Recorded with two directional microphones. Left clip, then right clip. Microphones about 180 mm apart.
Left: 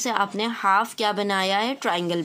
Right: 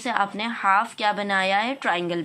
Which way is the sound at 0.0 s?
30° left (ahead or behind).